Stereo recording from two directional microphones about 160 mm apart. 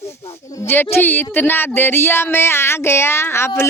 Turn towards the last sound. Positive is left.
turn(degrees=15)  # may be behind; listen again after turning